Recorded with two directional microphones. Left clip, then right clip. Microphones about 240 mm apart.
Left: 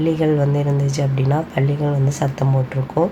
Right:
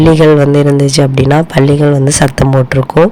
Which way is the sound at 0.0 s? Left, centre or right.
Right.